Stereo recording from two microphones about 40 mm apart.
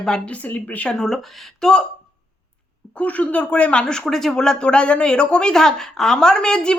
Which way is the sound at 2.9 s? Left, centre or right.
Left.